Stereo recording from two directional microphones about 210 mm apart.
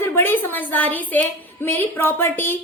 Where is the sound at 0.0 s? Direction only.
10° left (ahead or behind).